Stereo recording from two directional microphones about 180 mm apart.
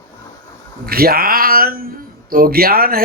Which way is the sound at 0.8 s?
55° right (ahead or behind).